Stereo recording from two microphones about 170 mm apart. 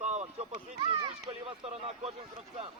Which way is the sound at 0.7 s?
30° right (ahead or behind).